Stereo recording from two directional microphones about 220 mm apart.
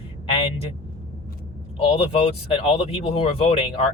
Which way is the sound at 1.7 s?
25° left (ahead or behind).